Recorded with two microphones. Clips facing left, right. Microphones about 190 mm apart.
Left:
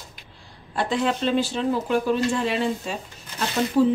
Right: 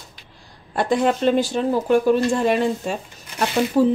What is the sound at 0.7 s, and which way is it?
Speech, 50° right (ahead or behind).